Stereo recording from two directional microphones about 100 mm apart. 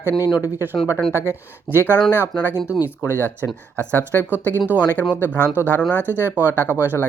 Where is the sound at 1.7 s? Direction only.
20° left (ahead or behind).